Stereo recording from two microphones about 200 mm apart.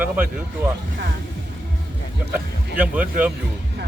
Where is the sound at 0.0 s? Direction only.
10° right (ahead or behind).